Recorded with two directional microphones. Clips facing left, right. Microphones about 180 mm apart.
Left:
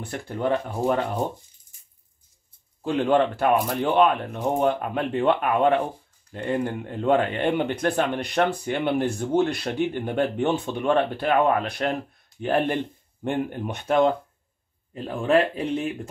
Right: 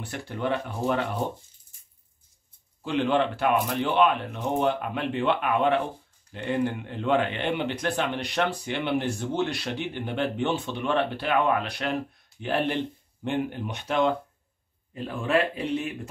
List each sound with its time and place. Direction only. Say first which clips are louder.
0.0 s speech: left 3 dB; 45° left (ahead or behind)
2.8 s speech: left 3 dB; 45° left (ahead or behind)